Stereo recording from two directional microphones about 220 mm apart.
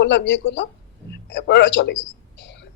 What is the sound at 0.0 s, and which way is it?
Speech, 50° left (ahead or behind).